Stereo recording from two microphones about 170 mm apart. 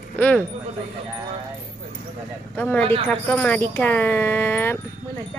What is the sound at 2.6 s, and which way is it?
Speech, 10° left (ahead or behind).